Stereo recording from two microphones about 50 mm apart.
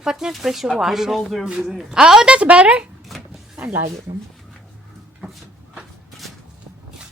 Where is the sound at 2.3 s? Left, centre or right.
Right.